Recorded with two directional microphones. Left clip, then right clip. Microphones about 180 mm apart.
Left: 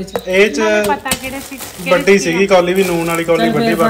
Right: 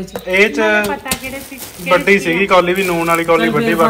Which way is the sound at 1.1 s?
55° left (ahead or behind).